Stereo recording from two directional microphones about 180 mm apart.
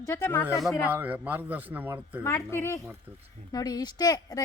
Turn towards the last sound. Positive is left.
turn(degrees=20)  # may be behind; listen again after turning